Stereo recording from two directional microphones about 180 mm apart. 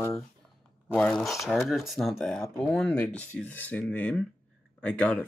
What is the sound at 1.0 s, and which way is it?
Speech, 5° left (ahead or behind).